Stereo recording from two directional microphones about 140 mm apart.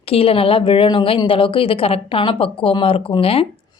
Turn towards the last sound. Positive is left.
turn(degrees=40)  # may be behind; listen again after turning